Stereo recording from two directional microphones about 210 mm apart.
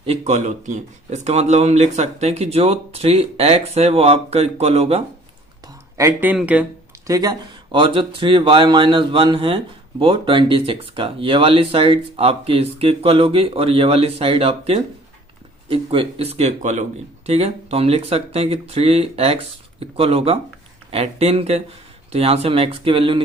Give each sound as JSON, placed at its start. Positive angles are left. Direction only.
{"t": 0.0, "sound": "speech", "side_deg": -30}
{"t": 5.6, "sound": "speech", "side_deg": -10}
{"t": 7.1, "sound": "speech", "side_deg": -20}